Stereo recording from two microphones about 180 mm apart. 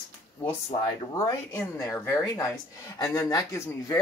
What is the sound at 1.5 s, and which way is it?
Speech, 15° left (ahead or behind).